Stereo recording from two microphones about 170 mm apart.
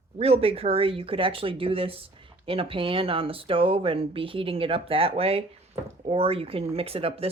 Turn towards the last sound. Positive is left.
turn(degrees=-35)  # may be behind; listen again after turning